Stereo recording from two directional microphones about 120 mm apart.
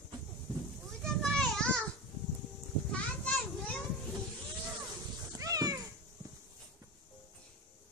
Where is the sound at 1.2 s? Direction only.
5° left (ahead or behind).